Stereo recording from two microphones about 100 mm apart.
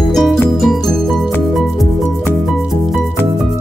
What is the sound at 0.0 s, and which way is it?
Music, centre (ahead or behind).